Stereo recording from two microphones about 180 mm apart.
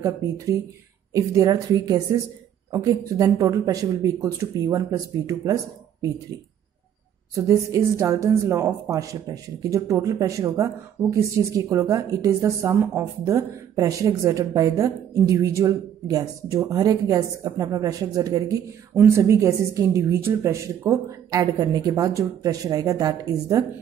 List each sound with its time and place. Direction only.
1.1 s speech: 20° right (ahead or behind)
7.3 s speech: 15° right (ahead or behind)